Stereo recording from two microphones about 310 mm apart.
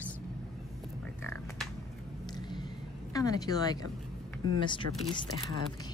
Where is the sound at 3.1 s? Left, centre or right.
Centre.